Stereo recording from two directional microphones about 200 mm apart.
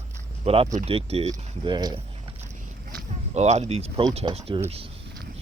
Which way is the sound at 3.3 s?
35° right (ahead or behind).